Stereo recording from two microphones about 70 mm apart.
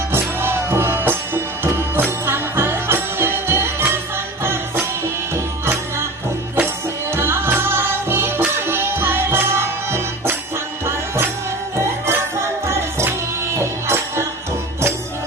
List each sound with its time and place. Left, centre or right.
0.1 s music: right
7.1 s music: right
12.6 s music: right